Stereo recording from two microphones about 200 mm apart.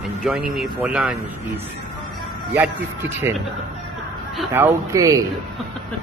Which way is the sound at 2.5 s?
10° right (ahead or behind).